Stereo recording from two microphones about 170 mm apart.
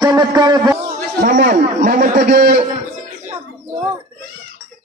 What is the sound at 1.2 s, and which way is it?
A man's voice, 55° right (ahead or behind).